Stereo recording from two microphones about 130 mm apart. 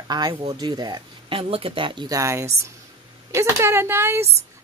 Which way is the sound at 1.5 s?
45° right (ahead or behind).